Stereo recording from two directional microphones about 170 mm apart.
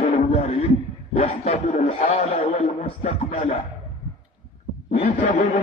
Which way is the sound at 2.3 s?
50° left (ahead or behind).